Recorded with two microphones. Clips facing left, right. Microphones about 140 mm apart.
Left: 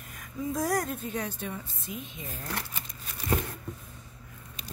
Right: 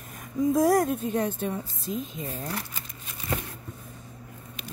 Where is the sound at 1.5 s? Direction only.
35° right (ahead or behind).